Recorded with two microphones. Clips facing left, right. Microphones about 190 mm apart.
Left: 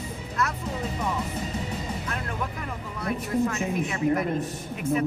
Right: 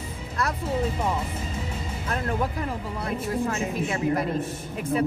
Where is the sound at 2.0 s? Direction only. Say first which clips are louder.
Right 5 dB; 35° right (ahead or behind).